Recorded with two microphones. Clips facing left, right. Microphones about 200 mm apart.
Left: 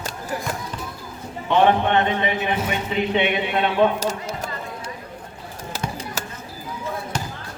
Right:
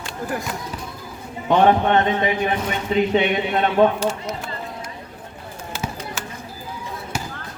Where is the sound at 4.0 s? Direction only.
40° left (ahead or behind).